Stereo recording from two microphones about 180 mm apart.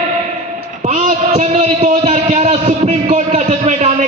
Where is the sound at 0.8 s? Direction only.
40° right (ahead or behind).